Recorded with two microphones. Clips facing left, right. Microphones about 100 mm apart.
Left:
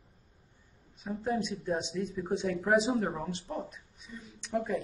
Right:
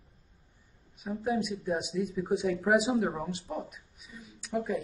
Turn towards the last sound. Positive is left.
turn(degrees=-5)  # may be behind; listen again after turning